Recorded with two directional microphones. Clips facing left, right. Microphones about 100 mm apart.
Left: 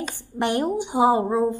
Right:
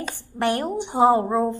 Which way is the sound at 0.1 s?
20° left (ahead or behind).